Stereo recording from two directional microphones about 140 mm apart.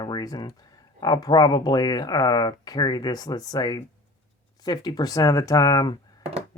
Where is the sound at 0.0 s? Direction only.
30° left (ahead or behind).